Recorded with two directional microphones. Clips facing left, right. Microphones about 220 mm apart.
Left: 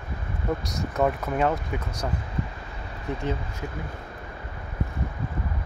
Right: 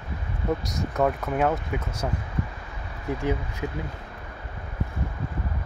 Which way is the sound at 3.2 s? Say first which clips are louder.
Right 4 dB; 10° right (ahead or behind).